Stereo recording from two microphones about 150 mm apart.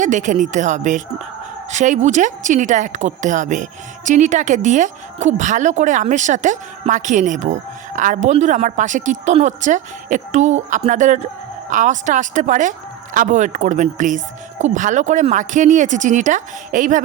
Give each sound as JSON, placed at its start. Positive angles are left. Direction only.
{"t": 0.0, "sound": "a woman's voice", "side_deg": -55}